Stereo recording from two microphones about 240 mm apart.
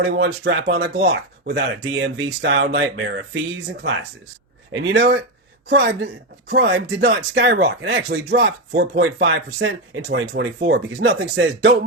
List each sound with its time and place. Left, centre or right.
0.0 s speech: right
4.7 s speech: right